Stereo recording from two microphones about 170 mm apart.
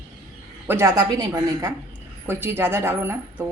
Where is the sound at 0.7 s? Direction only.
15° right (ahead or behind).